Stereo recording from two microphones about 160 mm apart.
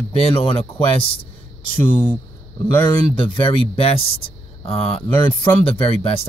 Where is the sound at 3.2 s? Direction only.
35° left (ahead or behind).